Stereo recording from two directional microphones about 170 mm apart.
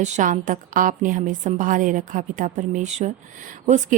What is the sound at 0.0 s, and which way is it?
Speech, 45° right (ahead or behind).